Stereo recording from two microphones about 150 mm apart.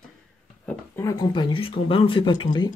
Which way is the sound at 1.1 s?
30° left (ahead or behind).